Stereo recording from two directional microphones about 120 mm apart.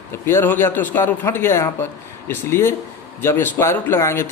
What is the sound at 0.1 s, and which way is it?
Speech, 20° left (ahead or behind).